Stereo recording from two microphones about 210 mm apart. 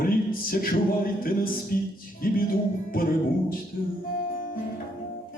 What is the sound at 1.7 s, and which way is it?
Music, 45° left (ahead or behind).